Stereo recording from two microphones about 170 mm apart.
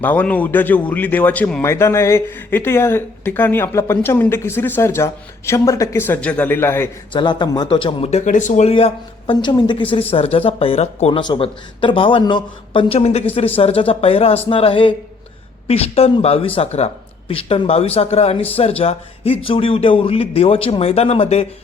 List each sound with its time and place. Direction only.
0.0 s speech: 10° left (ahead or behind)
7.1 s a man's voice: 25° left (ahead or behind)